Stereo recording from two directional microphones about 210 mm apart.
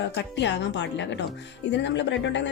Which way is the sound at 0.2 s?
55° left (ahead or behind).